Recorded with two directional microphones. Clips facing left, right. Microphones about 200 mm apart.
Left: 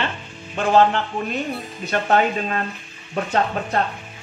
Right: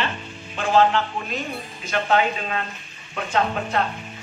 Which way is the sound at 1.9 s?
40° left (ahead or behind).